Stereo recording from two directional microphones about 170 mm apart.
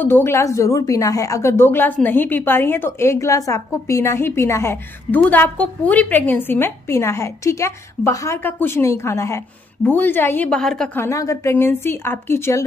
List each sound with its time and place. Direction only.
0.0 s a woman's voice: 15° left (ahead or behind)
11.0 s a woman's voice: 20° left (ahead or behind)